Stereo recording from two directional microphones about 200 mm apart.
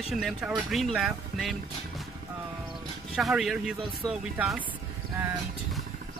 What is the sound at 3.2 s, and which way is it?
Speech, centre (ahead or behind).